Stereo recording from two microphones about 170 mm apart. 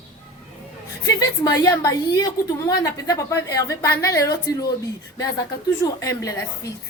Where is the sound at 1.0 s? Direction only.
20° left (ahead or behind).